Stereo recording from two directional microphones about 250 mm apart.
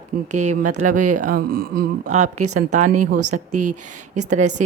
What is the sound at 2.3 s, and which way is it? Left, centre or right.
Speech, right.